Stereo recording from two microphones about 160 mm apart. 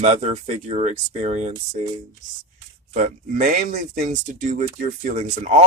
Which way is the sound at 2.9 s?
50° right (ahead or behind).